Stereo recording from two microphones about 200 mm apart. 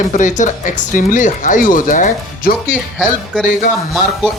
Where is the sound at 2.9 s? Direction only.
Centre (ahead or behind).